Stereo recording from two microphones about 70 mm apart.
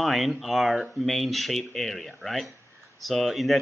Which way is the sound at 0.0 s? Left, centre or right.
Centre.